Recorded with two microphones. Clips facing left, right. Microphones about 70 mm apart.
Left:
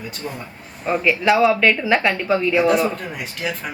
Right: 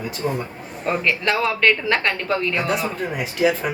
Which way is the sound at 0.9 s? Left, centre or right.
Centre.